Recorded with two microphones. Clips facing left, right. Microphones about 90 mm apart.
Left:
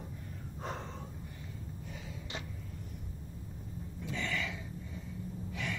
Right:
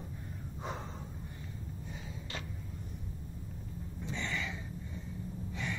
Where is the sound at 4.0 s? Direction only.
25° right (ahead or behind).